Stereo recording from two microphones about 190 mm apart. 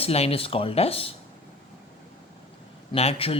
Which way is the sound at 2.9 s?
30° left (ahead or behind).